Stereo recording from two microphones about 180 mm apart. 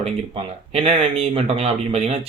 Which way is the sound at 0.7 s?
35° right (ahead or behind).